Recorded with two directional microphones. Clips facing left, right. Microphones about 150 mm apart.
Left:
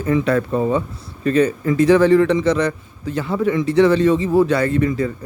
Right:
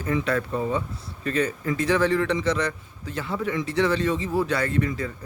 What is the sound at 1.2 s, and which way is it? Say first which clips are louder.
A man's voice: left 9 dB; 20° left (ahead or behind).